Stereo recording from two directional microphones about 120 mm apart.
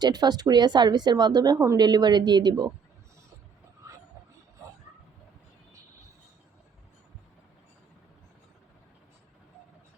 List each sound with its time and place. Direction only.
0.0 s speech: 35° right (ahead or behind)
1.5 s speech: 25° right (ahead or behind)
1.8 s speech: 35° right (ahead or behind)